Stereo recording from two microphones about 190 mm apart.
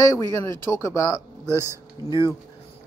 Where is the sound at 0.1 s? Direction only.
15° left (ahead or behind).